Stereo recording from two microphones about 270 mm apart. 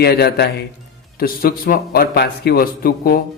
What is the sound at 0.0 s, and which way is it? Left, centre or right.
Speech, left.